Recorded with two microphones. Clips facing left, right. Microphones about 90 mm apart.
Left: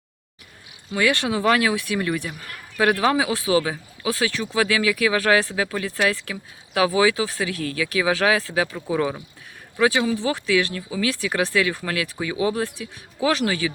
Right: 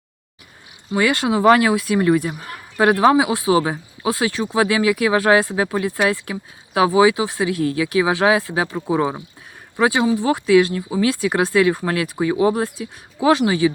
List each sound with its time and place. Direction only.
0.9 s speech: 25° right (ahead or behind)
12.5 s speech: 25° right (ahead or behind)